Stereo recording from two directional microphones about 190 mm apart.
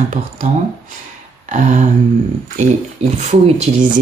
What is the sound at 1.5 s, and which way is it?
Speech, 40° right (ahead or behind).